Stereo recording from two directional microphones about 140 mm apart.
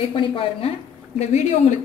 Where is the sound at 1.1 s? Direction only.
55° left (ahead or behind).